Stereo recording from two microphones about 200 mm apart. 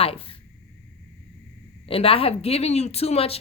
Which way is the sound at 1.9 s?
30° left (ahead or behind).